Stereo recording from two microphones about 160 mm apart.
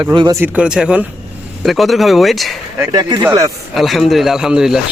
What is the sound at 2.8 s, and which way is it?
Speech, 25° right (ahead or behind).